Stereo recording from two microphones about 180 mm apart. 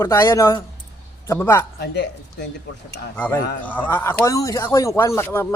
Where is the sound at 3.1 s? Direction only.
10° left (ahead or behind).